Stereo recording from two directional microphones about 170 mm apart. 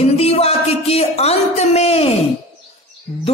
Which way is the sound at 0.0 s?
35° left (ahead or behind).